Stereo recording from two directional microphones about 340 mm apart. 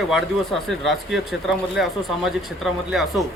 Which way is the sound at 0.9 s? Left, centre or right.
Centre.